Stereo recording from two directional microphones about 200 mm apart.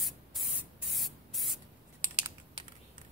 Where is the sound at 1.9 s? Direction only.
15° right (ahead or behind).